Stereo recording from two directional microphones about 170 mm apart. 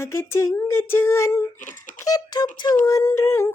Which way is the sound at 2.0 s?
20° left (ahead or behind).